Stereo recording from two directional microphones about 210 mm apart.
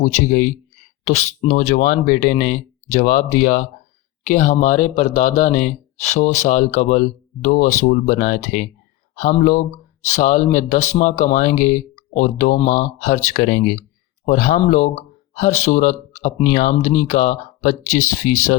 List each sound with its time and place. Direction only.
0.0 s speech: 40° left (ahead or behind)